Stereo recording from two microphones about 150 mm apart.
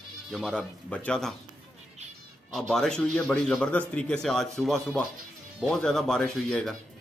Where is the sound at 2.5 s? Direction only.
5° left (ahead or behind).